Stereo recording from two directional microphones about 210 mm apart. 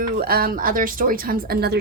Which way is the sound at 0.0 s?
45° right (ahead or behind).